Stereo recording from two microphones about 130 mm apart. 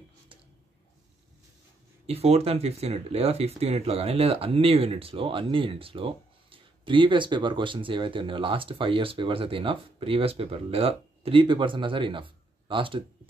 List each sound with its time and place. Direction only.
2.0 s speech: 50° right (ahead or behind)